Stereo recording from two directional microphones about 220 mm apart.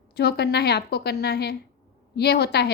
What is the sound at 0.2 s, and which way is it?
A woman's voice, 50° left (ahead or behind).